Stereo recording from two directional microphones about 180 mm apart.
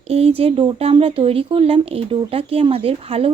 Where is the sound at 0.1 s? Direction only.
35° right (ahead or behind).